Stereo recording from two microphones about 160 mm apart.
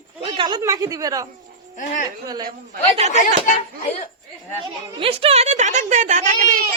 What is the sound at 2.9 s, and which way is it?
Speech, 40° right (ahead or behind).